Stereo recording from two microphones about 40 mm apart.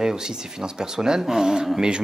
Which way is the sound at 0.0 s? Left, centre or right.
Centre.